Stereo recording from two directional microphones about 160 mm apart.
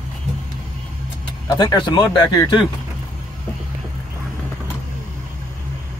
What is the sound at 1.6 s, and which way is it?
Speech, 25° left (ahead or behind).